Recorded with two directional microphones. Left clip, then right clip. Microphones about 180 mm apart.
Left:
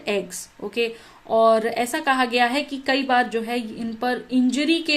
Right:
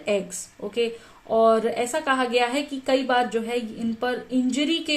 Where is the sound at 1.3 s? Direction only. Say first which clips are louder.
Left 2 dB; 40° left (ahead or behind).